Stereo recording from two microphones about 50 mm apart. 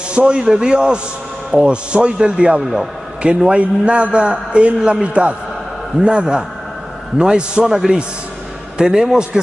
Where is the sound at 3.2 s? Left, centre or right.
Right.